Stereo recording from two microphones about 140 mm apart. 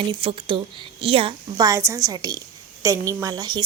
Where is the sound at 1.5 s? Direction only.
25° right (ahead or behind).